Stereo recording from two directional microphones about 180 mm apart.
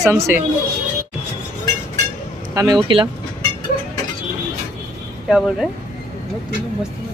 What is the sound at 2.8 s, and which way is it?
Speech, 25° right (ahead or behind).